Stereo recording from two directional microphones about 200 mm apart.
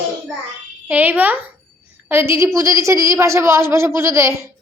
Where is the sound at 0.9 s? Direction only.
10° right (ahead or behind).